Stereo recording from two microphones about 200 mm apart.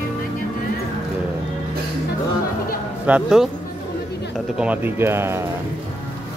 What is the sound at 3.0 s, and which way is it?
Speech, 5° right (ahead or behind).